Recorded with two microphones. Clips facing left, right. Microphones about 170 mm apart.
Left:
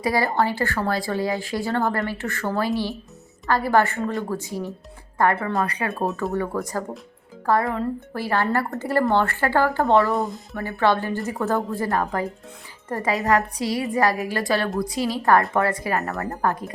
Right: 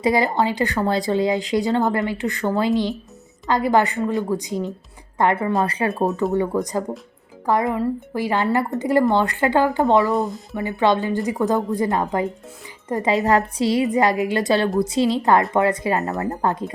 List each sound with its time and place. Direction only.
0.0 s a woman's voice: 20° right (ahead or behind)
10.1 s speech: centre (ahead or behind)
10.5 s a woman's voice: 15° right (ahead or behind)